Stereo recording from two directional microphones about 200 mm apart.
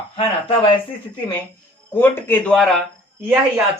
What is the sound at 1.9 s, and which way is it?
Speech, 10° left (ahead or behind).